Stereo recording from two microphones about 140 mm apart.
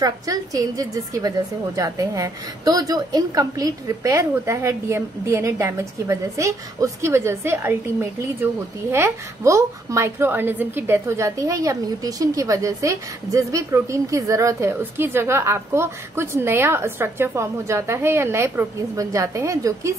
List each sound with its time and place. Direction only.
0.0 s a woman's voice: 25° right (ahead or behind)